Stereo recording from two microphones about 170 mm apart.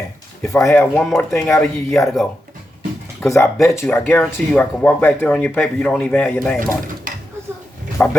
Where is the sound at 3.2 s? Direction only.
15° left (ahead or behind).